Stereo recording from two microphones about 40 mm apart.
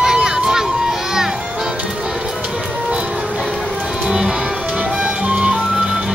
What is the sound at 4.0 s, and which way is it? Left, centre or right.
Music, centre.